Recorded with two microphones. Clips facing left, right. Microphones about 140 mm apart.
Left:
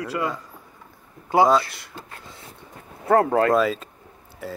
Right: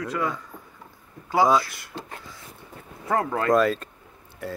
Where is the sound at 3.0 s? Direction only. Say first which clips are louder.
Left 7 dB; 50° left (ahead or behind).